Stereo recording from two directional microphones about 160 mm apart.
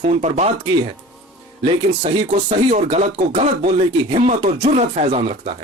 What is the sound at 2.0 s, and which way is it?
Speech, 45° right (ahead or behind).